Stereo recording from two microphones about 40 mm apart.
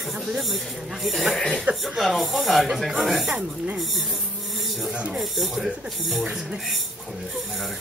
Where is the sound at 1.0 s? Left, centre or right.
Centre.